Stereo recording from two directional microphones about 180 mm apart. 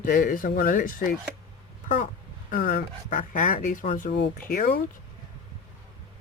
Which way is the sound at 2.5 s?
50° left (ahead or behind).